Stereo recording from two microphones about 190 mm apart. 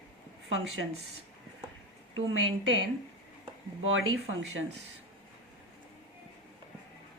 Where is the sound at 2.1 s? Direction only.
90° right.